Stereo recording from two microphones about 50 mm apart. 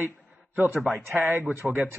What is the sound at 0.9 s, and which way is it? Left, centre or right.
Speech, right.